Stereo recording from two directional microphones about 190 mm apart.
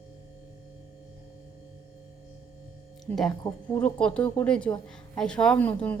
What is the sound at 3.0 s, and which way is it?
A woman's voice, centre (ahead or behind).